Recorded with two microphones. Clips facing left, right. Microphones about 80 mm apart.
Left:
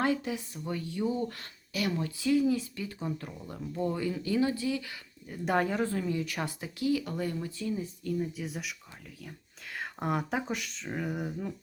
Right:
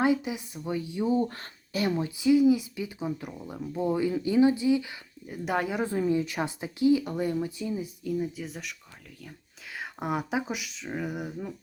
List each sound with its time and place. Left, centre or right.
0.0 s speech: centre
5.5 s speech: centre
5.8 s speech: centre
9.7 s speech: centre